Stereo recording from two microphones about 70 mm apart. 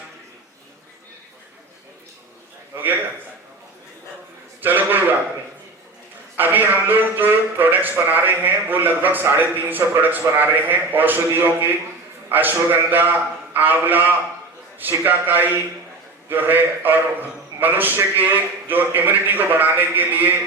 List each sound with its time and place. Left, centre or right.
4.6 s a man's voice: right
6.3 s a man's voice: right